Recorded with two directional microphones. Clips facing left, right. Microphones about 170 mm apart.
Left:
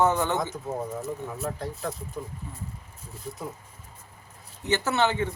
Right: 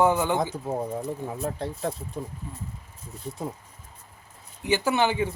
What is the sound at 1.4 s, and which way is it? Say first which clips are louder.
Speech: right 4 dB; 30° right (ahead or behind).